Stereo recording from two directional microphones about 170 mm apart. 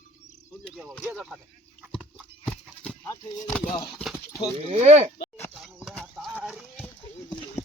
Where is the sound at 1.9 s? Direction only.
Centre (ahead or behind).